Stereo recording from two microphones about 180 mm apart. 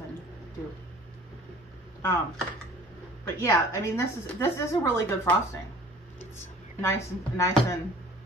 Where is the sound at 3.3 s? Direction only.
15° left (ahead or behind).